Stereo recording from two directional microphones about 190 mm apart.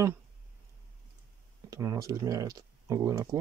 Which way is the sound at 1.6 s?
15° right (ahead or behind).